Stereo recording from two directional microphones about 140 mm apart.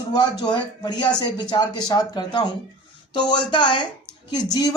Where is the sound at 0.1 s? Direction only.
30° left (ahead or behind).